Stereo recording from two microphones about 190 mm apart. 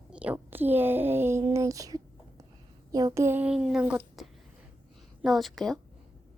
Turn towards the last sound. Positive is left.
turn(degrees=0)  # may be behind; listen again after turning